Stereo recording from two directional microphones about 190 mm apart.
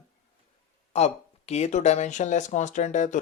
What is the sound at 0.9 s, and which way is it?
Speech, 35° left (ahead or behind).